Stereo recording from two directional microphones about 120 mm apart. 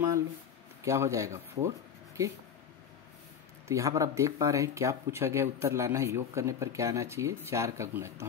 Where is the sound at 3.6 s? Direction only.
25° right (ahead or behind).